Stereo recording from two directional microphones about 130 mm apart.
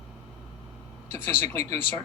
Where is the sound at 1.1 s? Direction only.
15° left (ahead or behind).